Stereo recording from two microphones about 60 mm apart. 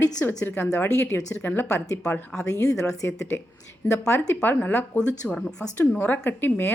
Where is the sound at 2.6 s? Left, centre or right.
Left.